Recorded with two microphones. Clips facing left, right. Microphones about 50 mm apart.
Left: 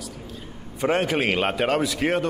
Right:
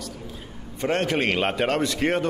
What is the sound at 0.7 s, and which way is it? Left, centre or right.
A man's voice, centre.